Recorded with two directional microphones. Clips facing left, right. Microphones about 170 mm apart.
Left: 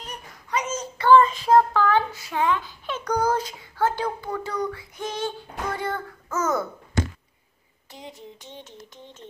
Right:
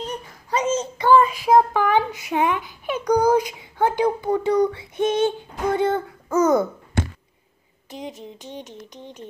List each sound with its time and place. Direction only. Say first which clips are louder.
0.0 s a sound: right 8 dB; 30° right (ahead or behind)
0.9 s speech: left 1 dB; 15° right (ahead or behind)
7.9 s speech: right 7 dB; 20° right (ahead or behind)